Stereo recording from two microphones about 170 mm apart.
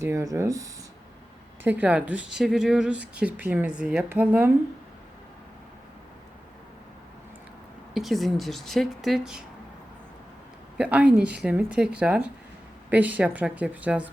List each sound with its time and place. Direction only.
0.0 s speech: 15° right (ahead or behind)
7.9 s speech: centre (ahead or behind)
10.8 s speech: 5° right (ahead or behind)